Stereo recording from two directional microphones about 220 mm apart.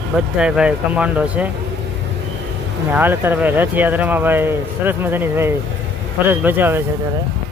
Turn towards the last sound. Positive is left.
turn(degrees=-10)  # may be behind; listen again after turning